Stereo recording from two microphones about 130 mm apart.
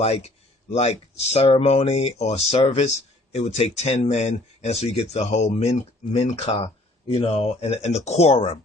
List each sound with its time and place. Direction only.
0.0 s speech: 55° left (ahead or behind)